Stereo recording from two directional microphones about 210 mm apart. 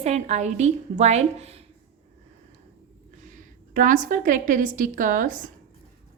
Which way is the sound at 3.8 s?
40° right (ahead or behind).